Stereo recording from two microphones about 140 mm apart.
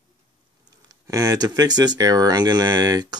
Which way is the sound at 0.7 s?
25° right (ahead or behind).